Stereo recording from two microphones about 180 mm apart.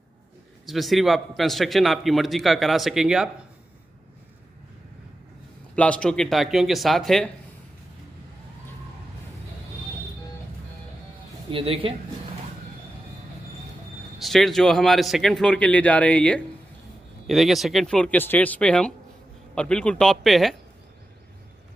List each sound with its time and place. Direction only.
0.7 s a man's voice: centre (ahead or behind)
5.8 s a man's voice: 5° left (ahead or behind)
11.5 s speech: 30° right (ahead or behind)
14.1 s a man's voice: centre (ahead or behind)